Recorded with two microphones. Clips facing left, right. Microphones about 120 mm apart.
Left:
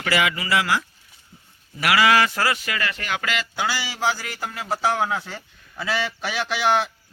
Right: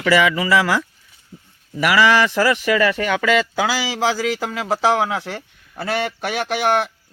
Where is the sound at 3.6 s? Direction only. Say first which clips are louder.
Right 4 dB; 90° right.